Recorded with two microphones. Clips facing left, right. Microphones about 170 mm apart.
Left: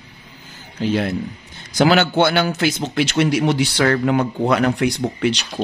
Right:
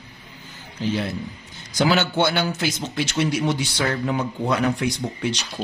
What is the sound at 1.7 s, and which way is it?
A man's voice, 65° left (ahead or behind).